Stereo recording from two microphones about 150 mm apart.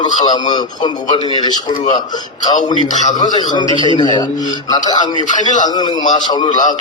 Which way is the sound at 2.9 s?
55° left (ahead or behind).